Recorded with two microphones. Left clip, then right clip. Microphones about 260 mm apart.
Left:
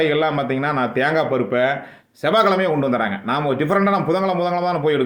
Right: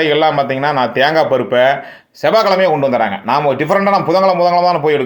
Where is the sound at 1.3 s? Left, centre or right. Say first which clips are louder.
Right 7 dB; centre.